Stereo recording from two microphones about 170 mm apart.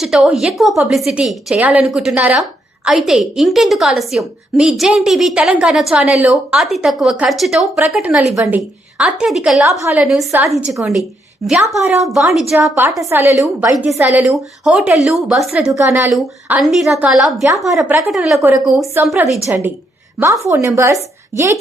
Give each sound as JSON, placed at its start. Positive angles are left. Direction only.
{"t": 0.0, "sound": "a woman's voice", "side_deg": -5}
{"t": 9.6, "sound": "a woman's voice", "side_deg": -15}
{"t": 10.0, "sound": "a woman's voice", "side_deg": 0}
{"t": 13.0, "sound": "a woman's voice", "side_deg": -15}
{"t": 15.7, "sound": "a woman's voice", "side_deg": -10}
{"t": 16.1, "sound": "a woman's voice", "side_deg": 0}